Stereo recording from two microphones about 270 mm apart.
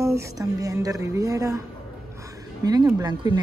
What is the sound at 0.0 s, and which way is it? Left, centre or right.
Speech, centre.